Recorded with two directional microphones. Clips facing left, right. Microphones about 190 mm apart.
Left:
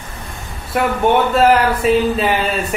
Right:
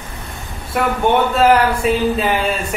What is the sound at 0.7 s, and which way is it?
Speech, centre (ahead or behind).